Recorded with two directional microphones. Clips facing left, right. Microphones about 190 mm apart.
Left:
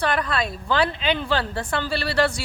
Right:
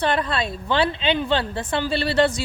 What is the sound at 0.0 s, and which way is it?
A woman's voice, 25° right (ahead or behind).